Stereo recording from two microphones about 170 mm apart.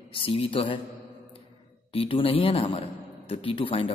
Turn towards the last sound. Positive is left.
turn(degrees=30)  # may be behind; listen again after turning